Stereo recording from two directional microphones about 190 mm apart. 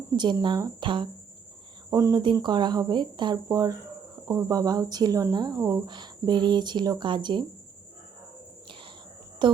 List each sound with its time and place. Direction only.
0.1 s speech: 20° right (ahead or behind)
9.4 s a woman's voice: 25° right (ahead or behind)